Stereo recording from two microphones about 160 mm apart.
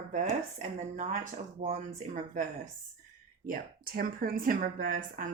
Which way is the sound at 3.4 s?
60° right (ahead or behind).